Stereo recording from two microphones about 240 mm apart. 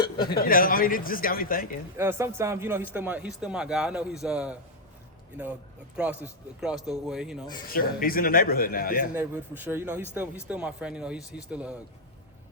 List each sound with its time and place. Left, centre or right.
0.3 s speech: left
2.0 s a man's voice: centre
6.0 s a man's voice: centre
7.7 s speech: left
9.1 s a man's voice: centre